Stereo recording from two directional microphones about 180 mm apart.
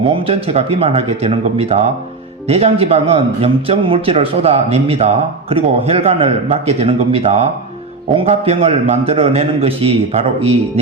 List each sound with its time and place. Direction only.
0.1 s a man's voice: 30° right (ahead or behind)